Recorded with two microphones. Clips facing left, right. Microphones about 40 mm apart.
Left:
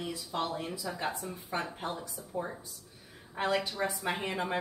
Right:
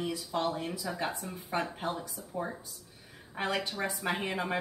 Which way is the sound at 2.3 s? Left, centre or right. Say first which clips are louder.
Even; centre.